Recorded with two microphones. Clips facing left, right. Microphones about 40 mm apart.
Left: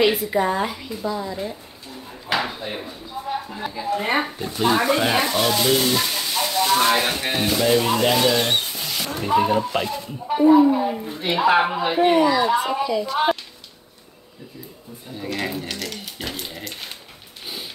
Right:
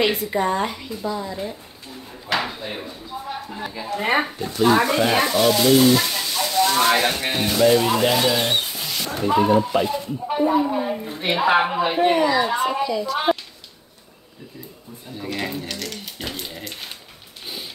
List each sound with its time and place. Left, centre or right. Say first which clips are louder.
0.0 s a woman's voice: left 2 dB; centre
4.0 s speech: right 3 dB; centre
4.4 s speech: right 3 dB; centre
6.8 s a woman's voice: right 1 dB; centre
9.8 s a woman's voice: right 2 dB; centre
11.1 s speech: right 1 dB; right
11.3 s a woman's voice: left 1 dB; centre
15.1 s a sound: left 1 dB; centre